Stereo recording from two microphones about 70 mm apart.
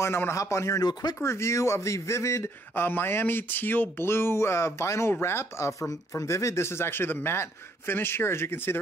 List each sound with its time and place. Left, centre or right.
0.0 s speech: left
0.7 s speech: left
1.2 s speech: left